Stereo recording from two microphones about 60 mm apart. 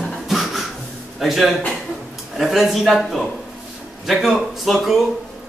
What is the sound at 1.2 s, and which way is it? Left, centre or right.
A man's voice, centre.